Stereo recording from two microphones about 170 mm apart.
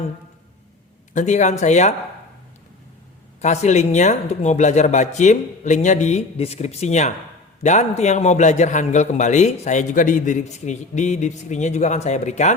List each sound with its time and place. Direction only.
1.1 s a man's voice: 45° left (ahead or behind)
3.4 s a man's voice: 40° left (ahead or behind)